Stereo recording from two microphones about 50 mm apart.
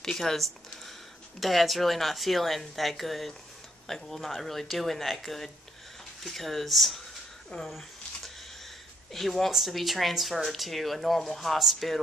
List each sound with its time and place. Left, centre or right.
0.0 s speech: centre
7.5 s speech: centre
9.1 s speech: centre